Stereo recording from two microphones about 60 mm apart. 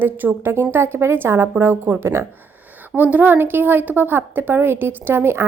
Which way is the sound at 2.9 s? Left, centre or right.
Right.